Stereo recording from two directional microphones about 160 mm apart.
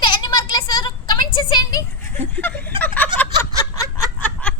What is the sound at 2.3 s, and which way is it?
Speech, 10° left (ahead or behind).